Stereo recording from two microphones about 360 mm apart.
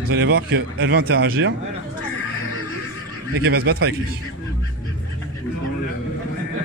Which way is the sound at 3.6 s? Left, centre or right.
Right.